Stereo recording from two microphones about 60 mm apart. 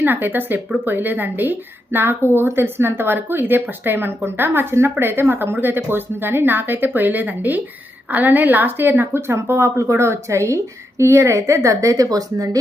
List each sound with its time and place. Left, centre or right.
0.0 s a woman's voice: right